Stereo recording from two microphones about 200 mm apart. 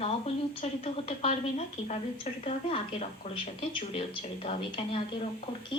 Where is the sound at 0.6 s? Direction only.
30° left (ahead or behind).